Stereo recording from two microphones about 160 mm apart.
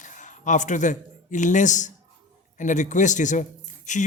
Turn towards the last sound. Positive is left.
turn(degrees=50)  # may be behind; listen again after turning